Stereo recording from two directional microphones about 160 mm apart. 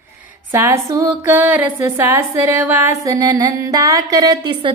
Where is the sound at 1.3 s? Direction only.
15° right (ahead or behind).